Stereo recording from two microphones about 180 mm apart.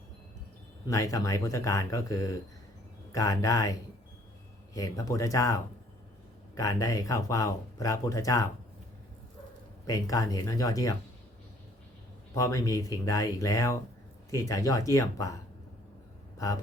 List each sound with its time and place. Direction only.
0.9 s speech: 20° left (ahead or behind)
9.8 s speech: 20° left (ahead or behind)
12.3 s speech: 20° left (ahead or behind)